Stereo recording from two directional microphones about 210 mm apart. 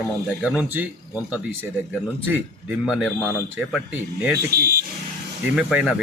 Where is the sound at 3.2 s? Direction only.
10° left (ahead or behind).